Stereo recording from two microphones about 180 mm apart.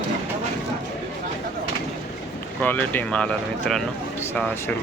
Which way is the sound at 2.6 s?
10° left (ahead or behind).